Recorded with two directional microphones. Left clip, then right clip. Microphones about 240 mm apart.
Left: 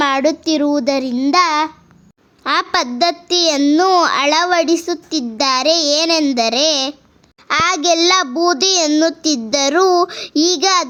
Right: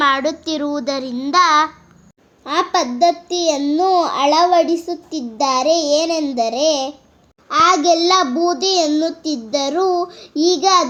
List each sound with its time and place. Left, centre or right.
0.0 s a child's voice: left
2.4 s a child's voice: left